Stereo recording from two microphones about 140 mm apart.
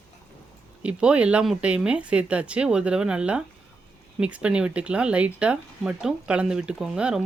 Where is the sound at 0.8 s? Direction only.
10° right (ahead or behind).